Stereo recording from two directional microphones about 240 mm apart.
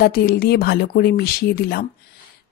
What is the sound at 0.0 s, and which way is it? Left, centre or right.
Speech, left.